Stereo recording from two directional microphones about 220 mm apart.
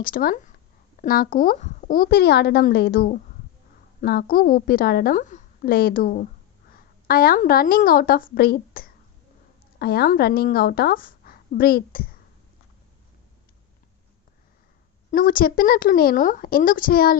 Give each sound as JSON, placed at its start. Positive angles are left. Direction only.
{"t": 0.0, "sound": "a woman's voice", "side_deg": 40}
{"t": 15.1, "sound": "a woman's voice", "side_deg": 40}